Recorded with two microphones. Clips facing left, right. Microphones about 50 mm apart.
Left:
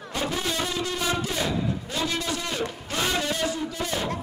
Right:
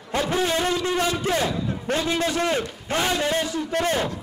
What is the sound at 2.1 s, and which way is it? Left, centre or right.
A man's voice, right.